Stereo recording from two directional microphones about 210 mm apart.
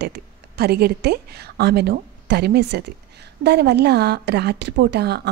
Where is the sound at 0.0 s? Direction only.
50° right (ahead or behind).